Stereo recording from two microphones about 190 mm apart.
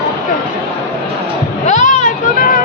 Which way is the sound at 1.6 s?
40° left (ahead or behind).